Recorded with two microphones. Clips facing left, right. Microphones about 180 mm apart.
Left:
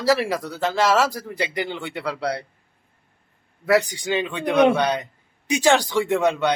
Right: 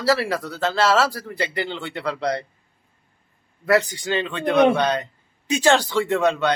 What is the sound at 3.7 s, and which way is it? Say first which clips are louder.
Speech: even; 10° left (ahead or behind).